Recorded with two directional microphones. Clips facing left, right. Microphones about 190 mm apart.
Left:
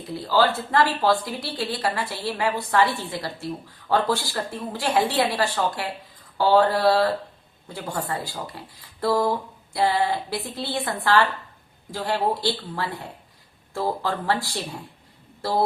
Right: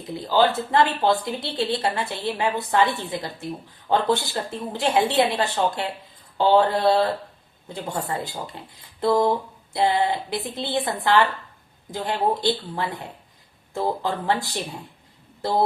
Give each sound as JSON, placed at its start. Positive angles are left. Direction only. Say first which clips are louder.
{"t": 0.1, "sound": "speech", "louder": "right 1 dB", "side_deg": -20}
{"t": 15.4, "sound": "speech", "louder": "right 1 dB", "side_deg": -20}